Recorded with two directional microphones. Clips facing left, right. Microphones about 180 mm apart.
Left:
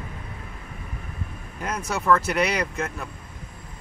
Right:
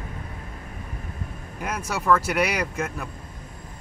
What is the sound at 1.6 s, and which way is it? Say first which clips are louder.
Speech: left 1 dB; 10° right (ahead or behind).